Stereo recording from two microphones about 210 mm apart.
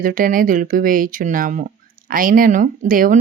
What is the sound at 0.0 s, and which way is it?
Speech, 40° right (ahead or behind).